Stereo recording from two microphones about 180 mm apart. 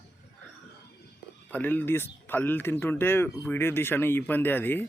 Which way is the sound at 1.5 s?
10° left (ahead or behind).